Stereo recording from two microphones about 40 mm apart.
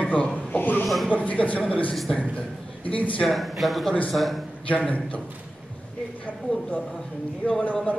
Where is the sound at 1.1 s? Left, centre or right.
Left.